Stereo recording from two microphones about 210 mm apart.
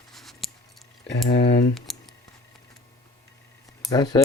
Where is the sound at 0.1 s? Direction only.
Centre (ahead or behind).